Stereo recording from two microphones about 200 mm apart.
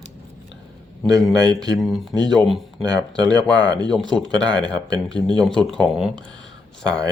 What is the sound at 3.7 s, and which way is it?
Speech, 20° right (ahead or behind).